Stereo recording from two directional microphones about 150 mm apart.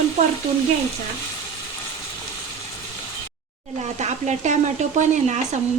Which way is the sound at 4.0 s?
50° right (ahead or behind).